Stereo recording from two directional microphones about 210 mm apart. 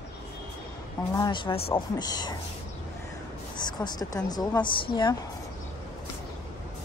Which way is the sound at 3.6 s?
20° left (ahead or behind).